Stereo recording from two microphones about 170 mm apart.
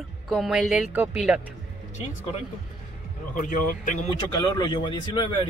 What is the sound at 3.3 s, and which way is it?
Speech, 50° left (ahead or behind).